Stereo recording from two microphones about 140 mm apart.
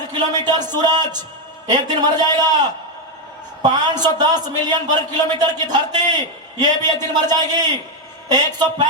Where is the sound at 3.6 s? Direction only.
30° right (ahead or behind).